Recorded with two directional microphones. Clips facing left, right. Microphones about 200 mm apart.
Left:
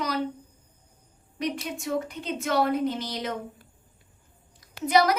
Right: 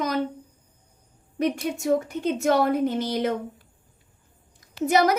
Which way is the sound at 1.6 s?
45° right (ahead or behind).